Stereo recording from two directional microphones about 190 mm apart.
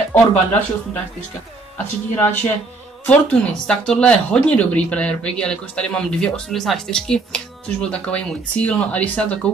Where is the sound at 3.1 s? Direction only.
5° left (ahead or behind).